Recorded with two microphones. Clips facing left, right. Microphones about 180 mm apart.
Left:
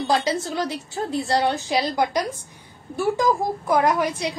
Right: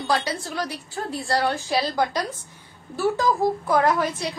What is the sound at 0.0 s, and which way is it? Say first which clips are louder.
A woman's voice: left 3 dB; 20° left (ahead or behind).